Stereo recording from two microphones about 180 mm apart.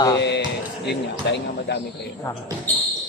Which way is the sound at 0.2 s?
75° left (ahead or behind).